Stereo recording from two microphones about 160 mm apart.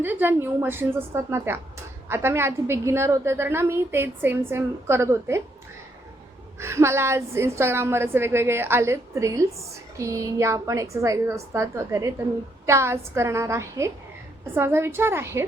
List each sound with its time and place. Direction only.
0.0 s a woman's voice: 10° right (ahead or behind)
6.6 s a woman's voice: 15° right (ahead or behind)